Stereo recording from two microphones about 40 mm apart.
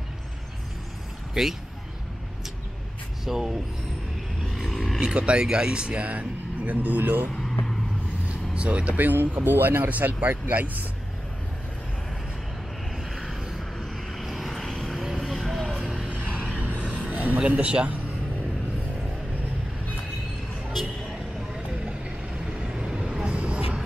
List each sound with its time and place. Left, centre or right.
1.4 s speech: centre
3.3 s speech: centre
4.6 s a sound: centre
5.0 s speech: right
8.3 s vehicle: right
9.0 s speech: right
9.8 s speech: right
13.1 s a sound: centre
13.6 s vehicle: centre
14.6 s vehicle: centre
16.1 s vehicle: right
17.5 s speech: right
22.6 s vehicle: centre
23.2 s vehicle: right